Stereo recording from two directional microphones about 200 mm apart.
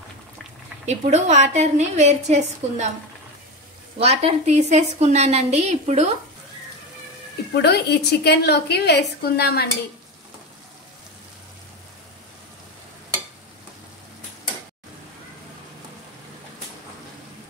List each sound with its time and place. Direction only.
0.8 s a woman's voice: 35° right (ahead or behind)
4.0 s a woman's voice: 30° right (ahead or behind)
7.5 s a woman's voice: 55° left (ahead or behind)